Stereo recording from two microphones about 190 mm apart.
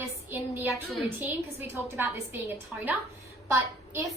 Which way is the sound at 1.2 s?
10° right (ahead or behind).